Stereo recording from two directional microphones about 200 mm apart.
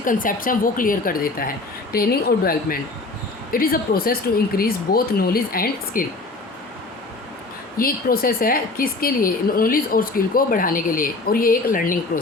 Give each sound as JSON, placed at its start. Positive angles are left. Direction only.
{"t": 0.0, "sound": "a woman's voice", "side_deg": 45}
{"t": 7.8, "sound": "a woman's voice", "side_deg": 45}